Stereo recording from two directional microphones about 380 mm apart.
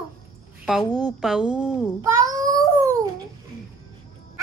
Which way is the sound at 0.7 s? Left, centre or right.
Centre.